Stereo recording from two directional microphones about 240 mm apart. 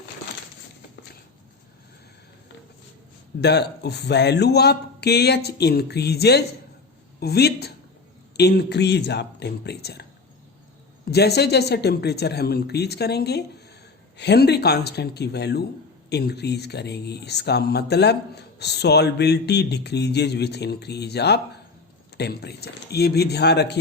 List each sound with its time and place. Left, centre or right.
3.4 s speech: left
11.1 s speech: left